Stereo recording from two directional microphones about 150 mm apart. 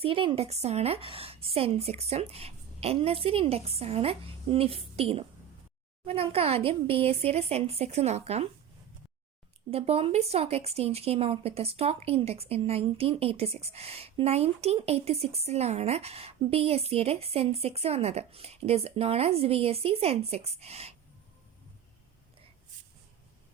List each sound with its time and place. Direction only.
0.0 s a woman's voice: 35° right (ahead or behind)
9.6 s speech: 40° right (ahead or behind)